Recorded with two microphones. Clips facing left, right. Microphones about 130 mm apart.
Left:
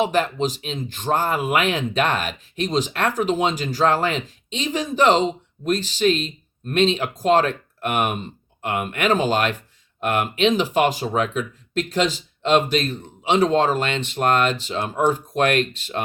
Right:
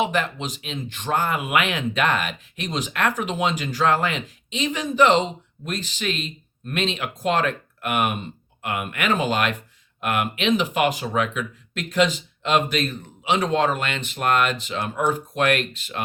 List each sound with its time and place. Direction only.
0.0 s speech: 40° left (ahead or behind)